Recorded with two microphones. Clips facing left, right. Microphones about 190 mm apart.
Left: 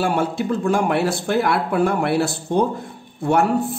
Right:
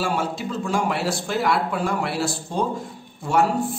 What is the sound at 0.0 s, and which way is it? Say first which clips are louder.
Speech: left 4 dB; 55° left (ahead or behind).